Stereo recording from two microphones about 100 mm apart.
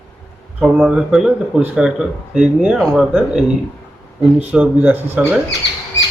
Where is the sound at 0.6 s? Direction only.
10° right (ahead or behind).